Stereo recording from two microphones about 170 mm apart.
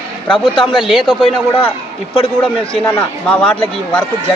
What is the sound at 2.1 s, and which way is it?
Speech, 35° left (ahead or behind).